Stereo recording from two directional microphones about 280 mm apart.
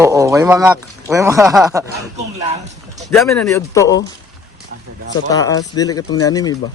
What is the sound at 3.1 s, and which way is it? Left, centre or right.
Speech, centre.